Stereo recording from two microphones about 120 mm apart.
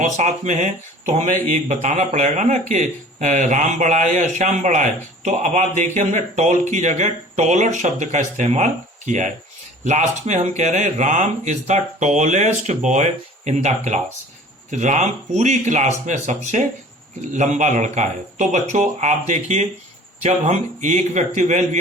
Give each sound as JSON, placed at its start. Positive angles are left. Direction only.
{"t": 0.0, "sound": "speech", "side_deg": -85}
{"t": 9.8, "sound": "speech", "side_deg": -75}
{"t": 14.7, "sound": "speech", "side_deg": -90}
{"t": 17.3, "sound": "speech", "side_deg": -85}